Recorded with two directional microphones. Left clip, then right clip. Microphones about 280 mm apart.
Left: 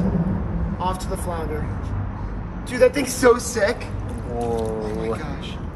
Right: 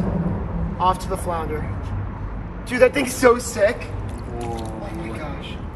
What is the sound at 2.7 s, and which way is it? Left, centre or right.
Speech, centre.